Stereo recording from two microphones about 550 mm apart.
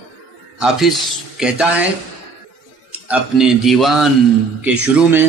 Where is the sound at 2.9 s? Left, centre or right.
Centre.